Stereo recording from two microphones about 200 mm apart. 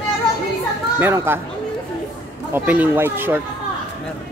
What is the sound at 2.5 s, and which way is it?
Speech, 10° right (ahead or behind).